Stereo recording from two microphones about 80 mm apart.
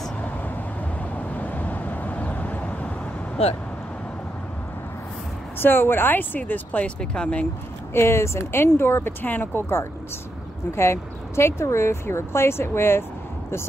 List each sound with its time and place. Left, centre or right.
1.1 s vehicle: centre
5.6 s speech: left
7.9 s speech: left